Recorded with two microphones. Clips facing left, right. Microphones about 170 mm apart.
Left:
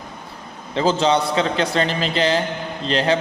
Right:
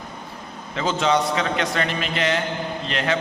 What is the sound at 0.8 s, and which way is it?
A man's voice, 30° left (ahead or behind).